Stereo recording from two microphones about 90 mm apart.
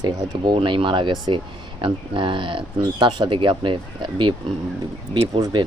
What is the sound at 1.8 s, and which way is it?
Speech, 70° right (ahead or behind).